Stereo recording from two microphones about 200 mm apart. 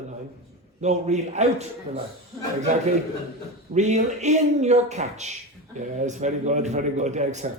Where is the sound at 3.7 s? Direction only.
35° right (ahead or behind).